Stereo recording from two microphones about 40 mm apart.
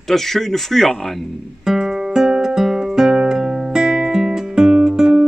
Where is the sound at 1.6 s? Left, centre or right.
Centre.